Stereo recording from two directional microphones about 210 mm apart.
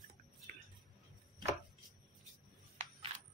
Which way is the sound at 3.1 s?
30° right (ahead or behind).